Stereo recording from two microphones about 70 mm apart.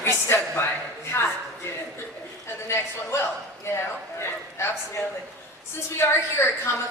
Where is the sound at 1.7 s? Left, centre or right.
Left.